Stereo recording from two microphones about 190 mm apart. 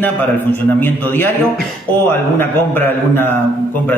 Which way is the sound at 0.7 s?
10° left (ahead or behind).